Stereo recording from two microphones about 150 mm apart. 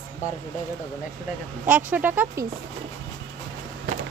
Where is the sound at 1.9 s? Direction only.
10° right (ahead or behind).